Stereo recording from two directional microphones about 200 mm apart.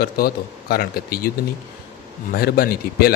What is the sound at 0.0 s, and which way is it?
Speech, 50° left (ahead or behind).